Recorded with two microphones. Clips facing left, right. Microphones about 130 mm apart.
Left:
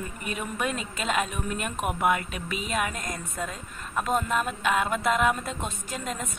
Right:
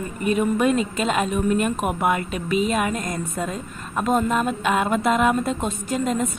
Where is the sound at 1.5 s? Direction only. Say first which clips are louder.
Right 8 dB; 40° right (ahead or behind).